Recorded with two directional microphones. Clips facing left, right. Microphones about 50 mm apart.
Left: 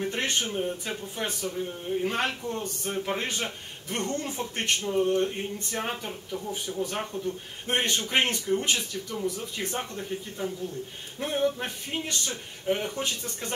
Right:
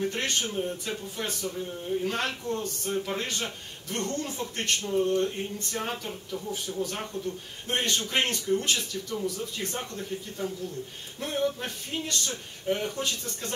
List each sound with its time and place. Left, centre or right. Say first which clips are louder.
0.0 s speech: even; centre